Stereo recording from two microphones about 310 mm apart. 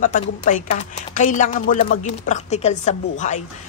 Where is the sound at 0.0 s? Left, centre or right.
Left.